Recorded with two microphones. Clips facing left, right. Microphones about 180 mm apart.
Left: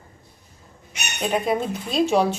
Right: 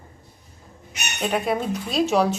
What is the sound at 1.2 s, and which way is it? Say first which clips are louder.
A woman's voice: left 1 dB; centre (ahead or behind).